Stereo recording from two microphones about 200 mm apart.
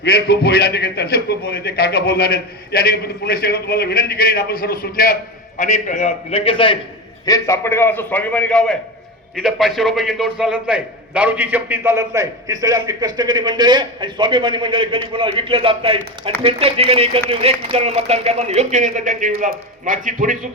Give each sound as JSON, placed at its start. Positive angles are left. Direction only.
{"t": 0.0, "sound": "a man's voice", "side_deg": 55}
{"t": 5.5, "sound": "a man's voice", "side_deg": 35}
{"t": 7.3, "sound": "a man's voice", "side_deg": 15}